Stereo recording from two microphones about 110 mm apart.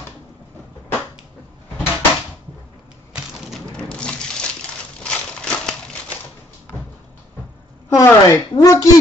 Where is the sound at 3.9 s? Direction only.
10° left (ahead or behind).